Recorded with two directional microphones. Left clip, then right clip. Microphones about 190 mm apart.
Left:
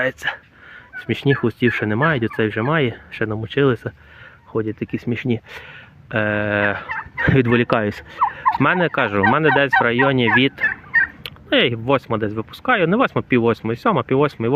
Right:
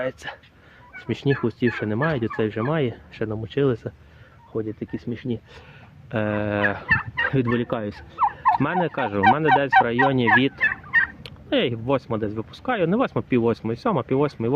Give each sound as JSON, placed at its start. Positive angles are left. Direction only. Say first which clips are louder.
{"t": 0.0, "sound": "speech", "louder": "left 7 dB", "side_deg": 10}
{"t": 4.5, "sound": "speech", "louder": "left 6 dB", "side_deg": 25}
{"t": 6.1, "sound": "fowl", "louder": "left 5 dB", "side_deg": -5}
{"t": 7.3, "sound": "speech", "louder": "left 7 dB", "side_deg": 15}
{"t": 8.6, "sound": "speech", "louder": "left 6 dB", "side_deg": 5}
{"t": 10.7, "sound": "fowl", "louder": "left 3 dB", "side_deg": -40}
{"t": 11.2, "sound": "speech", "louder": "left 6 dB", "side_deg": 0}